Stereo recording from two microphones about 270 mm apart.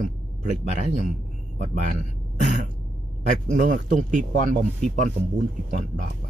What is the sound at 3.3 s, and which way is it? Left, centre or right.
Speech, right.